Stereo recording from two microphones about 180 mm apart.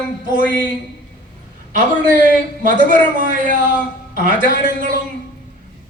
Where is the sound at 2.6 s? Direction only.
45° right (ahead or behind).